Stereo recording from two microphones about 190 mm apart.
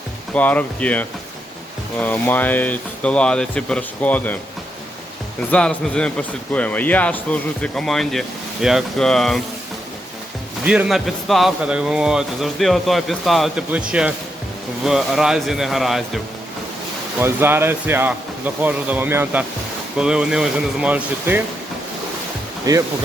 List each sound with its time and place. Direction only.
0.3 s speech: 5° left (ahead or behind)
5.5 s speech: 5° left (ahead or behind)
10.7 s speech: 5° right (ahead or behind)
14.8 s speech: centre (ahead or behind)
17.2 s speech: 10° right (ahead or behind)
22.7 s speech: 20° right (ahead or behind)